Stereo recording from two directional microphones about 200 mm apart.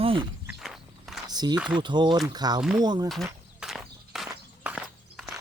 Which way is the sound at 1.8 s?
20° right (ahead or behind).